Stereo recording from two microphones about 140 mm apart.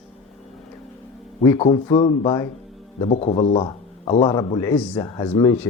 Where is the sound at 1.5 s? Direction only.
40° left (ahead or behind).